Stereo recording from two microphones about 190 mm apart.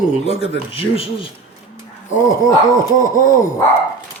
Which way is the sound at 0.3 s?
30° left (ahead or behind).